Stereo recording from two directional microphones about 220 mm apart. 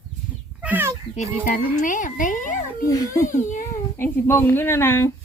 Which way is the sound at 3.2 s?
35° left (ahead or behind).